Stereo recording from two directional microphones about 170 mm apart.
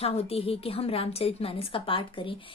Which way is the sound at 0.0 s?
35° left (ahead or behind).